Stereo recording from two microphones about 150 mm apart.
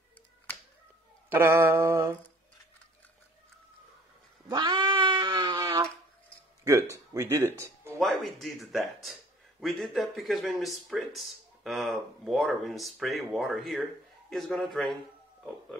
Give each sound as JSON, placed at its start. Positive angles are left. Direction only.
{"t": 1.3, "sound": "mantra", "side_deg": -15}
{"t": 4.5, "sound": "cat", "side_deg": -30}
{"t": 6.6, "sound": "speech", "side_deg": -20}
{"t": 8.0, "sound": "a man's voice", "side_deg": 0}